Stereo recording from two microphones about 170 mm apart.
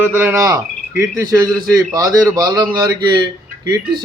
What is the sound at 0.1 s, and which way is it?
Speech, 10° right (ahead or behind).